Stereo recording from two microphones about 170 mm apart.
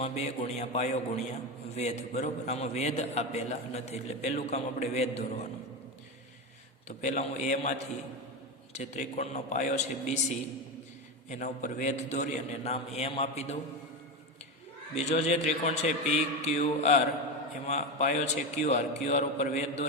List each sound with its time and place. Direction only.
0.0 s a man's voice: 40° left (ahead or behind)
6.8 s a man's voice: 45° left (ahead or behind)
8.7 s a man's voice: 40° left (ahead or behind)
14.9 s a man's voice: 40° left (ahead or behind)